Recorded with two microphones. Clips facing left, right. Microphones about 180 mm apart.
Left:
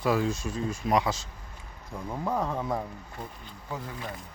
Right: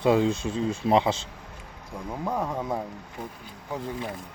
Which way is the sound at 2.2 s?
10° right (ahead or behind).